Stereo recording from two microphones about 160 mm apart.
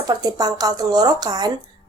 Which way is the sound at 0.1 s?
25° right (ahead or behind).